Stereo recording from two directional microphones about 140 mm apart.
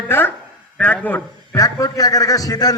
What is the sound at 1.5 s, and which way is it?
Speech, 25° left (ahead or behind).